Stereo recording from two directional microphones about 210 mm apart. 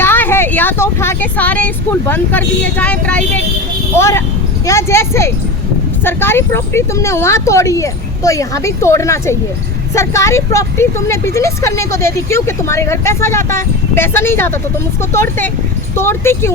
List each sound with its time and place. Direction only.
0.0 s speech: 10° left (ahead or behind)